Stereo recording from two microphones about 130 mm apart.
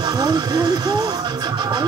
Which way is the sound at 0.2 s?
30° right (ahead or behind).